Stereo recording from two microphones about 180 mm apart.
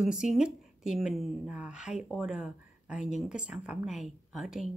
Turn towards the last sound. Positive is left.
turn(degrees=0)  # may be behind; listen again after turning